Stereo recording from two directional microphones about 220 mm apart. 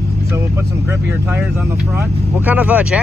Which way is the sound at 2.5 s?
5° right (ahead or behind).